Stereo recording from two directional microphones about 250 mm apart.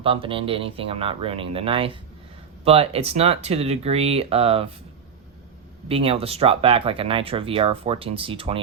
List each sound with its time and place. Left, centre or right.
0.0 s speech: right
5.9 s speech: right